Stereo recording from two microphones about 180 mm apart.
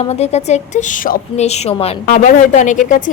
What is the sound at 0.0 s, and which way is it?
A woman's voice, 35° left (ahead or behind).